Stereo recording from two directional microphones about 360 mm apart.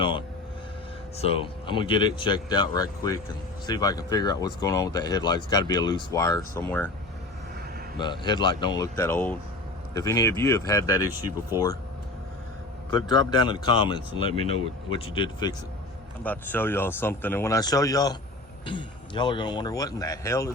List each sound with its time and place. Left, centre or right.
0.0 s vehicle: centre
1.2 s speech: centre
7.9 s speech: centre
11.5 s speech: centre
12.9 s speech: centre